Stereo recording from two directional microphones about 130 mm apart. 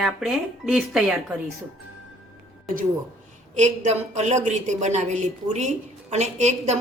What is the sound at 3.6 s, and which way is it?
A woman's voice, 60° right (ahead or behind).